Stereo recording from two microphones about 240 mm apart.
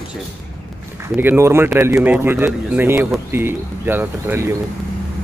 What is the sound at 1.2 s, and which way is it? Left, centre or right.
A man's voice, centre.